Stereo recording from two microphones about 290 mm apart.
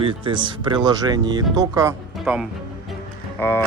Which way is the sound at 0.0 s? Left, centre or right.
Centre.